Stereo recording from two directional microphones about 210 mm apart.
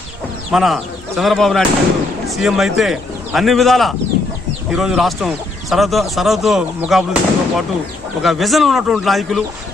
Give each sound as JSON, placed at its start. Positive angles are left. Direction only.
{"t": 0.5, "sound": "speech", "side_deg": 0}